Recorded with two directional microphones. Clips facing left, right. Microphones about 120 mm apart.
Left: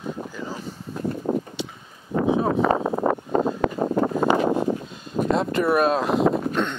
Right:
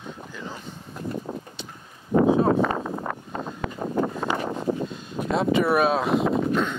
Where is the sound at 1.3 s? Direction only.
45° left (ahead or behind).